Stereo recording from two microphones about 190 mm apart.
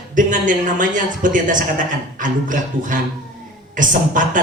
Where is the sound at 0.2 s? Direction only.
45° right (ahead or behind).